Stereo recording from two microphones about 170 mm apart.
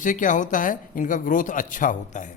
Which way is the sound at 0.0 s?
50° left (ahead or behind).